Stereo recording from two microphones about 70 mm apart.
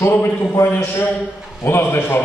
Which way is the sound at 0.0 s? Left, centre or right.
Left.